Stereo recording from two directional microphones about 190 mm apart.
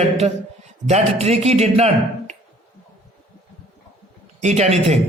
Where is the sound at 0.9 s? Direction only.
35° right (ahead or behind).